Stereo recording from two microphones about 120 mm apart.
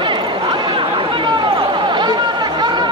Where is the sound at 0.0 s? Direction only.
40° right (ahead or behind).